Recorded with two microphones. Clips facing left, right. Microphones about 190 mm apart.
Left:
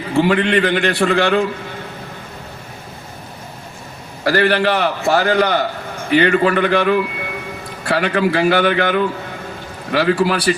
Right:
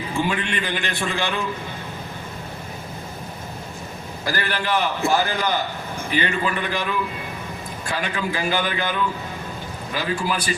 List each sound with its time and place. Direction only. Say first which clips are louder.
0.1 s a man's voice: left 11 dB; 65° left (ahead or behind)
4.2 s a man's voice: left 11 dB; 70° left (ahead or behind)